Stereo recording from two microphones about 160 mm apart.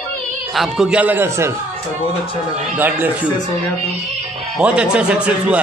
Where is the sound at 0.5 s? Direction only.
Centre (ahead or behind).